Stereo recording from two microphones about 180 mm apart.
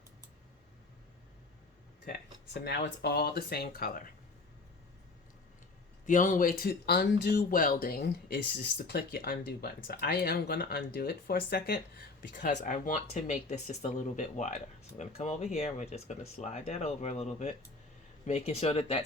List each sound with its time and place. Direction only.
2.0 s speech: 65° left (ahead or behind)
6.1 s speech: 45° left (ahead or behind); by 11.8 s 60° left (ahead or behind)
12.3 s speech: 45° left (ahead or behind)